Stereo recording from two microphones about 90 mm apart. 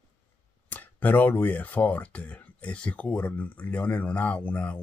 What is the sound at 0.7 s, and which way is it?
Speech, 20° left (ahead or behind).